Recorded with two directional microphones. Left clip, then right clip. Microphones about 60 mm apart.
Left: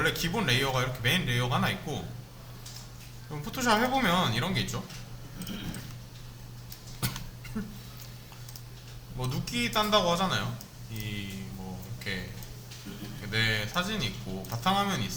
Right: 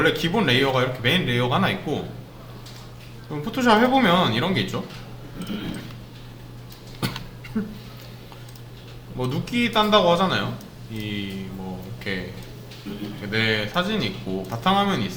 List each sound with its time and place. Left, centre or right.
0.0 s speech: left
3.2 s speech: left
7.0 s a sound: left
7.6 s speech: left
9.1 s speech: left
13.2 s speech: left